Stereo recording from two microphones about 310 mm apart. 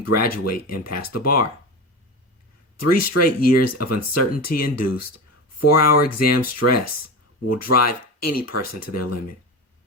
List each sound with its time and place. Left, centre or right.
0.0 s speech: left
2.7 s speech: left